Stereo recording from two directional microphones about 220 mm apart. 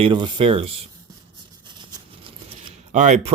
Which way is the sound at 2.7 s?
30° right (ahead or behind).